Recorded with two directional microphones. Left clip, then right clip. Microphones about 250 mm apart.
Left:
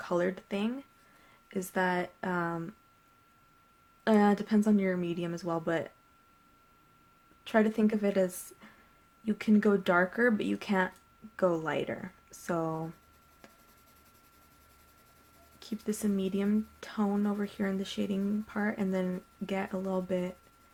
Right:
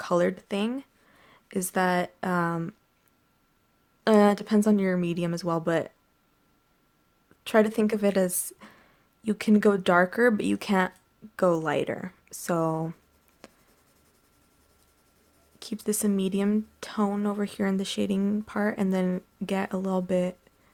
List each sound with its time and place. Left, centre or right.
0.0 s speech: right
4.0 s speech: right
7.4 s speech: right
13.4 s writing: right
15.5 s speech: right